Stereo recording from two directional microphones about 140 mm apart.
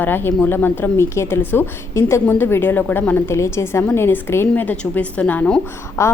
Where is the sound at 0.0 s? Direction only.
15° left (ahead or behind).